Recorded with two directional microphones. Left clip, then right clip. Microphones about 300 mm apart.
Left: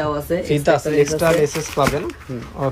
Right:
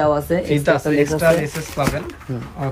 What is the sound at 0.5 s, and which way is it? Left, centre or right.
Speech, centre.